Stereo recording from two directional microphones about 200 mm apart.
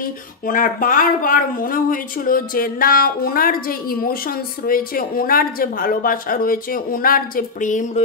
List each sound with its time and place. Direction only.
0.0 s speech: 45° left (ahead or behind)